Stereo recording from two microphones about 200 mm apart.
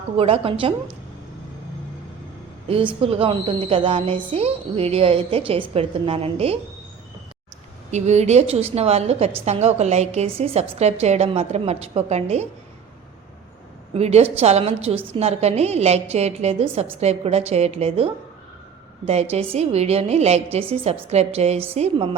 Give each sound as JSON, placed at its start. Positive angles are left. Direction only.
{"t": 0.2, "sound": "a woman's voice", "side_deg": -30}
{"t": 2.6, "sound": "a woman's voice", "side_deg": -30}
{"t": 7.9, "sound": "a woman's voice", "side_deg": -35}
{"t": 13.9, "sound": "a woman's voice", "side_deg": -30}